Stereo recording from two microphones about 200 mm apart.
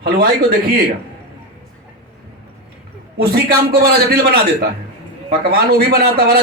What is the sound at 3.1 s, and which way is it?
Speech, 50° right (ahead or behind).